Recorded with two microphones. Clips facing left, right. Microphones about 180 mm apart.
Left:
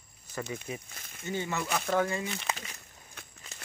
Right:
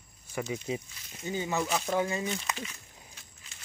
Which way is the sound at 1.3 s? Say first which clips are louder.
Right 2 dB; 15° right (ahead or behind).